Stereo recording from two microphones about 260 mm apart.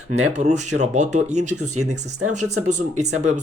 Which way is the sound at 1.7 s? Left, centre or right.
Right.